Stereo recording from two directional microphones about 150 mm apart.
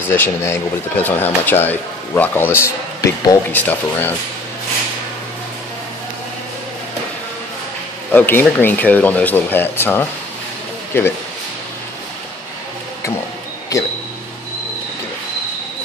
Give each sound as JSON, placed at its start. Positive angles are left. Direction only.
{"t": 0.1, "sound": "speech", "side_deg": 15}
{"t": 8.1, "sound": "speech", "side_deg": 15}